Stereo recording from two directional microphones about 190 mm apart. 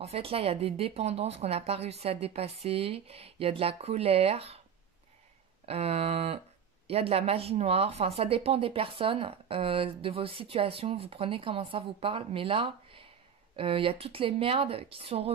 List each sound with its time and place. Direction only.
0.0 s speech: 30° right (ahead or behind)
5.7 s speech: 30° right (ahead or behind)